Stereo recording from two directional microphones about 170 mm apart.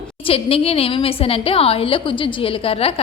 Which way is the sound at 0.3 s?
35° left (ahead or behind).